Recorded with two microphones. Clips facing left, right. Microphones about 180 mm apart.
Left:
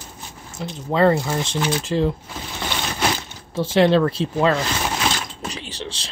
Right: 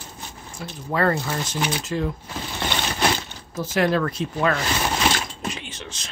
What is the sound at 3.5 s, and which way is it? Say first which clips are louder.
Speech: left 5 dB; 30° left (ahead or behind).